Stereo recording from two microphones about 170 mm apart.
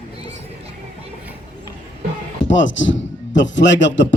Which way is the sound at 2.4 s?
90° left.